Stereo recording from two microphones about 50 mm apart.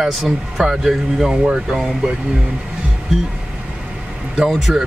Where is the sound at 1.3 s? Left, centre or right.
Centre.